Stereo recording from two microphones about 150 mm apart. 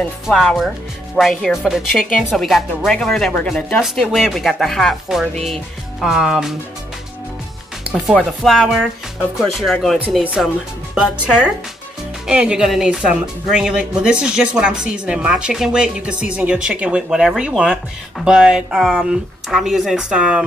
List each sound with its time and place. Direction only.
0.0 s a woman's voice: 5° left (ahead or behind)
8.1 s a woman's voice: centre (ahead or behind)
12.3 s a woman's voice: 5° right (ahead or behind)